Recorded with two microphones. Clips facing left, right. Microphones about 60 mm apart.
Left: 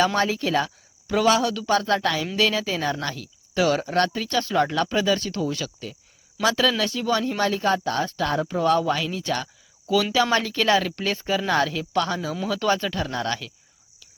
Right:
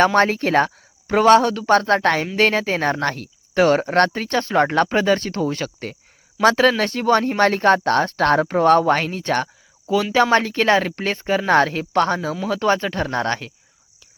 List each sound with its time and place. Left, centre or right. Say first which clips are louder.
0.0 s speech: right 6 dB; right
9.8 s speech: right 4 dB; right